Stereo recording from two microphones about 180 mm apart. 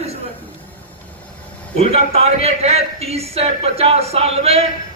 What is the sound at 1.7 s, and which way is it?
A man's voice, 35° right (ahead or behind).